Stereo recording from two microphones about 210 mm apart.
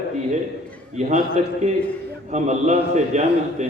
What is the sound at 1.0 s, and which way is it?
Speech, 30° right (ahead or behind).